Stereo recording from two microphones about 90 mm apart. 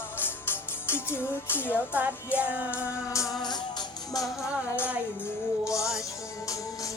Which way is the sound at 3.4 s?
50° left (ahead or behind).